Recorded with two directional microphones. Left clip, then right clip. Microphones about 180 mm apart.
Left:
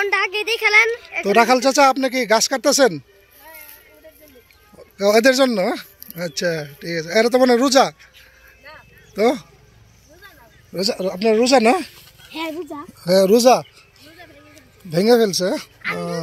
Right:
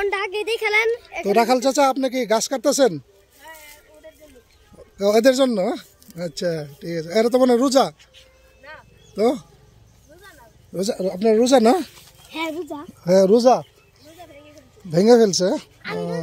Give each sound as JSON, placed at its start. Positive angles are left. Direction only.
{"t": 0.0, "sound": "speech", "side_deg": -15}
{"t": 4.9, "sound": "speech", "side_deg": -10}
{"t": 8.6, "sound": "a sound", "side_deg": -10}
{"t": 11.1, "sound": "speech", "side_deg": -25}
{"t": 13.0, "sound": "speech", "side_deg": -20}
{"t": 13.3, "sound": "speech", "side_deg": -5}
{"t": 14.9, "sound": "speech", "side_deg": -30}
{"t": 15.8, "sound": "a sound", "side_deg": -35}